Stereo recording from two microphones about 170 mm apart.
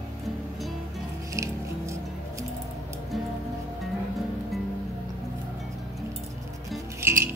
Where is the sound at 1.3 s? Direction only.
20° right (ahead or behind).